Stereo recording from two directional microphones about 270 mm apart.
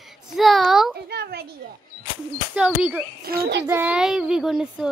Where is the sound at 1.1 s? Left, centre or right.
Right.